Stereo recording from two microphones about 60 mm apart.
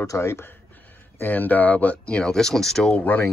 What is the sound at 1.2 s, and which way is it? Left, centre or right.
Speech, left.